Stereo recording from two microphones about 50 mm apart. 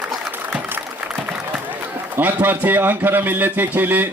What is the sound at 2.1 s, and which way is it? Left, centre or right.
A man's voice, right.